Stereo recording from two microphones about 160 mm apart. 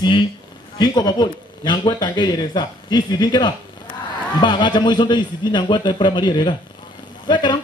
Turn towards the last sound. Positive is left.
turn(degrees=30)  # may be behind; listen again after turning